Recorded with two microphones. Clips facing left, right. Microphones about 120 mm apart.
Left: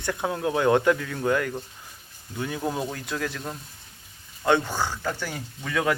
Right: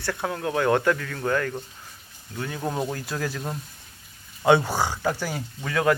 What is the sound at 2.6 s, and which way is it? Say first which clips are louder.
Speech: right 3 dB; centre (ahead or behind).